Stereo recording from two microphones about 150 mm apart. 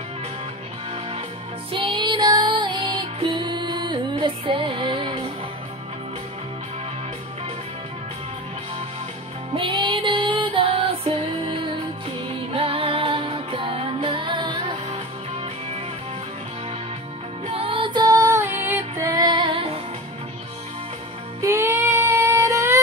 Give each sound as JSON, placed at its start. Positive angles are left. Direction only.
{"t": 1.7, "sound": "music", "side_deg": -35}
{"t": 9.5, "sound": "music", "side_deg": -35}
{"t": 17.5, "sound": "music", "side_deg": -35}
{"t": 21.4, "sound": "music", "side_deg": -20}